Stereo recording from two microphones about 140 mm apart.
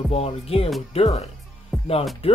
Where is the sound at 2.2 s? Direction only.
45° left (ahead or behind).